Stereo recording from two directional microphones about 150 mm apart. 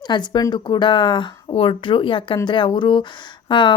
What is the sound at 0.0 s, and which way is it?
Speech, 30° left (ahead or behind).